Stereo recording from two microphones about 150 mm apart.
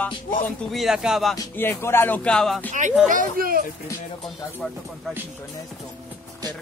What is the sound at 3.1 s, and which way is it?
Speech, 70° right (ahead or behind).